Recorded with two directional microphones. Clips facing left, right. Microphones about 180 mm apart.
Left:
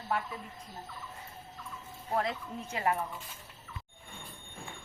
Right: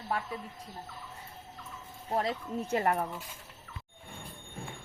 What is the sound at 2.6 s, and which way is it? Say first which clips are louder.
Speech: right 3 dB; 50° right (ahead or behind).